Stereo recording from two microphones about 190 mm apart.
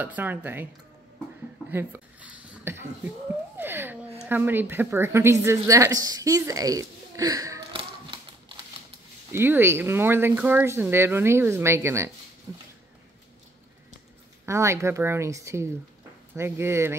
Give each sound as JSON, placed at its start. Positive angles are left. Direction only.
{"t": 0.0, "sound": "a woman's voice", "side_deg": -10}
{"t": 1.7, "sound": "a sound", "side_deg": -10}
{"t": 4.2, "sound": "a woman's voice", "side_deg": -10}
{"t": 7.7, "sound": "a sound", "side_deg": -25}
{"t": 9.3, "sound": "a woman's voice", "side_deg": -10}
{"t": 14.4, "sound": "a woman's voice", "side_deg": -15}